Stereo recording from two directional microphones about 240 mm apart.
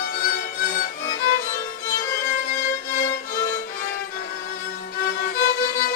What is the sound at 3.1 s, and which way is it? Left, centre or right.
Music, left.